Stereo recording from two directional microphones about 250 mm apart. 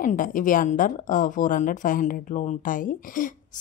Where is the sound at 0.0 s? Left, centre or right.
Left.